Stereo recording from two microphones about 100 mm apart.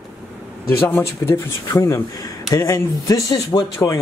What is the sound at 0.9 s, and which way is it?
Speech, 30° left (ahead or behind).